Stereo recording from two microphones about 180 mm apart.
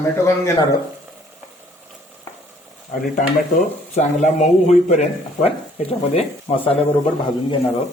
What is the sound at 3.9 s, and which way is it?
Speech, 40° left (ahead or behind).